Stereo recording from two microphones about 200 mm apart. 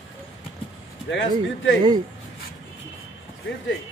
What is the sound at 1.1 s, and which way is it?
Speech, 65° left (ahead or behind).